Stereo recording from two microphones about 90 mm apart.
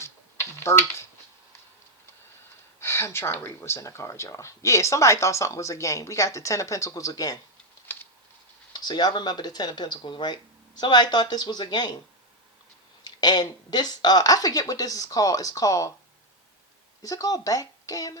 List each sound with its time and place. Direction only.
0.6 s speech: 30° left (ahead or behind)
2.8 s speech: 30° left (ahead or behind)
8.7 s speech: 55° left (ahead or behind)
13.1 s speech: 50° left (ahead or behind)
17.0 s speech: 40° left (ahead or behind)